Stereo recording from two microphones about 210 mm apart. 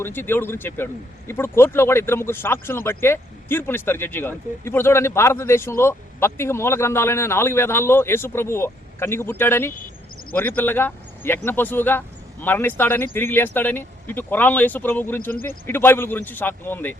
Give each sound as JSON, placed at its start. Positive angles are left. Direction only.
{"t": 0.0, "sound": "speech", "side_deg": 10}
{"t": 15.3, "sound": "speech", "side_deg": 45}
{"t": 15.6, "sound": "speech", "side_deg": 10}